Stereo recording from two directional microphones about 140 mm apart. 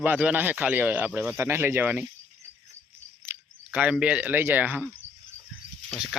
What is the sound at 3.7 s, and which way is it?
Speech, 10° right (ahead or behind).